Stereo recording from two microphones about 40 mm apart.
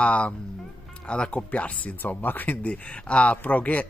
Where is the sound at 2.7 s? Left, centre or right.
Left.